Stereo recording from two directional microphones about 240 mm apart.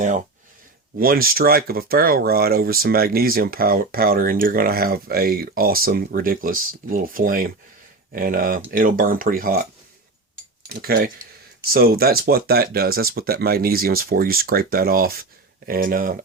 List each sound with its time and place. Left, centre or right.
0.9 s speech: right
10.7 s speech: right